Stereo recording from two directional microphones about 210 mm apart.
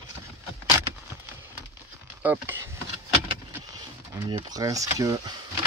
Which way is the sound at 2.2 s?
10° right (ahead or behind).